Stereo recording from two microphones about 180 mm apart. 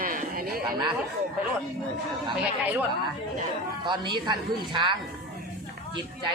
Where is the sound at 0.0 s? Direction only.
50° right (ahead or behind).